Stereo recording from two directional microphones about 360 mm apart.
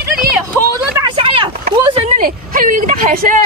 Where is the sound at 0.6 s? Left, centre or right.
Centre.